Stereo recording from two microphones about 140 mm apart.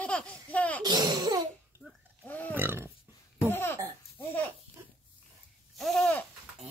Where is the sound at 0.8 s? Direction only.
30° right (ahead or behind).